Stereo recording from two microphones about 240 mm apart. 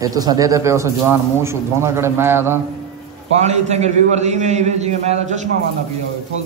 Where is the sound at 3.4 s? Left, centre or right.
Right.